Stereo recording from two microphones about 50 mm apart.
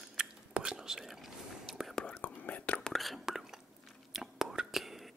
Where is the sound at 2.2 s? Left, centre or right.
Left.